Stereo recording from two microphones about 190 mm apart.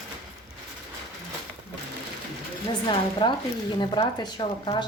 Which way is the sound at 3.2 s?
25° left (ahead or behind).